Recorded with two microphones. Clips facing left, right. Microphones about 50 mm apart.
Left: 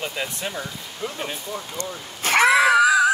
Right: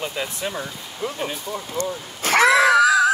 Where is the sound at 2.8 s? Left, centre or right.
Left.